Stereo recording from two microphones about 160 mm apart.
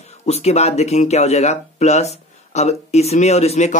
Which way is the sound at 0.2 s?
40° left (ahead or behind).